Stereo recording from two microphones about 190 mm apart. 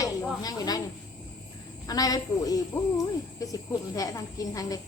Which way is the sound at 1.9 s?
20° left (ahead or behind).